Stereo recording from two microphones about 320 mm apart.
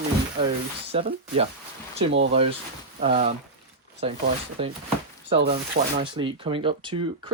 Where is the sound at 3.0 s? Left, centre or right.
Centre.